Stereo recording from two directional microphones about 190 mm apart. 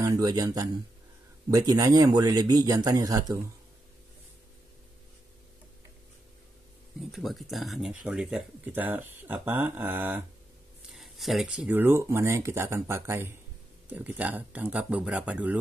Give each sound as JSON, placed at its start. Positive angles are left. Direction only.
{"t": 0.0, "sound": "a man's voice", "side_deg": -20}
{"t": 7.1, "sound": "speech", "side_deg": 0}